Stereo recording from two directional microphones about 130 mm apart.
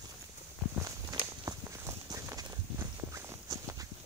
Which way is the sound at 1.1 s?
30° right (ahead or behind).